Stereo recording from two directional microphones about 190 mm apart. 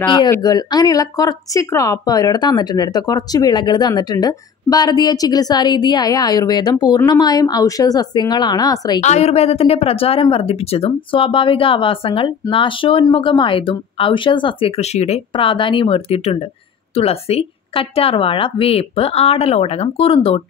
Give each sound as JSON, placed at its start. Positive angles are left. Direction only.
{"t": 0.1, "sound": "speech", "side_deg": 20}
{"t": 9.0, "sound": "a woman's voice", "side_deg": 35}